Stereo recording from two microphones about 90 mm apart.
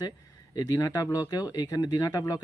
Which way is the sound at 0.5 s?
40° left (ahead or behind).